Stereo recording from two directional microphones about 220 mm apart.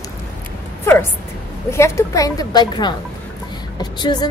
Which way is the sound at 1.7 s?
15° left (ahead or behind).